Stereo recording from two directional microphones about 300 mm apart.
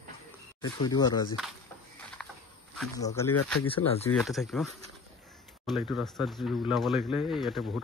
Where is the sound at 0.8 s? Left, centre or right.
Centre.